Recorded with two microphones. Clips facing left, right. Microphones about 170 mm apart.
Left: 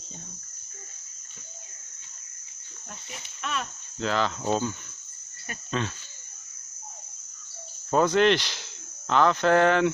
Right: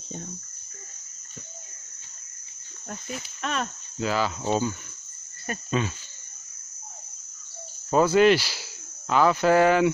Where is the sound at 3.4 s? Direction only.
40° right (ahead or behind).